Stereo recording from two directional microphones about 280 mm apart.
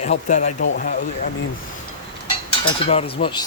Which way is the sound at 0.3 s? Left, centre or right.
Left.